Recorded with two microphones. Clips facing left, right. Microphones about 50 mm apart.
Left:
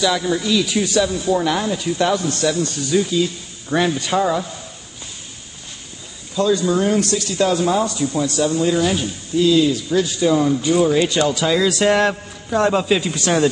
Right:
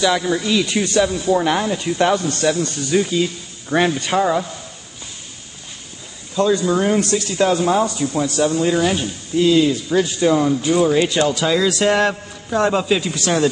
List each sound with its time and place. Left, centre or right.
0.0 s speech: centre
6.3 s speech: right
9.4 s a man's voice: right; by 13.1 s centre